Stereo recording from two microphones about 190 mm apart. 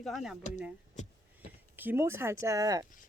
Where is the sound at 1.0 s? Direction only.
40° left (ahead or behind).